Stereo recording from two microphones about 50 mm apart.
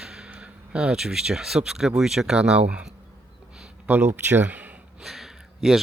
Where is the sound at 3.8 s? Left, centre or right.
Right.